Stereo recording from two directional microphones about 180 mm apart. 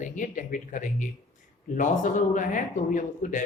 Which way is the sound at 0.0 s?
45° left (ahead or behind).